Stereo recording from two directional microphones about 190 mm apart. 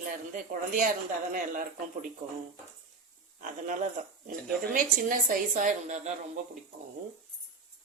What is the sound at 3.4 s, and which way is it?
A woman's voice, 45° right (ahead or behind).